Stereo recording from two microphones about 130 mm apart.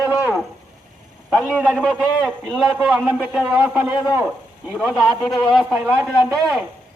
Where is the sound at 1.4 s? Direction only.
Centre (ahead or behind).